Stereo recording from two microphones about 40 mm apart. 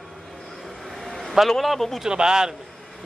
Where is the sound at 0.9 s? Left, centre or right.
Centre.